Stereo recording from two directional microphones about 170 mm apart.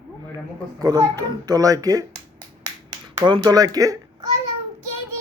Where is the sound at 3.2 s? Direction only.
25° right (ahead or behind).